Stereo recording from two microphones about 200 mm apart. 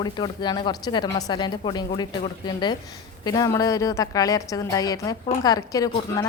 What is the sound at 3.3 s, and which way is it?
A woman's voice, 15° left (ahead or behind).